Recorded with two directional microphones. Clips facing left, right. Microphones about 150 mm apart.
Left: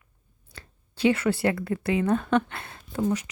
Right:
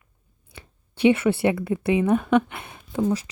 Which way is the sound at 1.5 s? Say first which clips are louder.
Right 4 dB; 20° right (ahead or behind).